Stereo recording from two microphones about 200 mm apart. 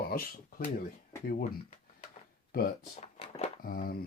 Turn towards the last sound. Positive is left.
turn(degrees=45)  # may be behind; listen again after turning